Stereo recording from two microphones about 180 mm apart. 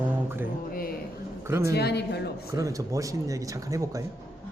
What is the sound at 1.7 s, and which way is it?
Speech, 65° left (ahead or behind).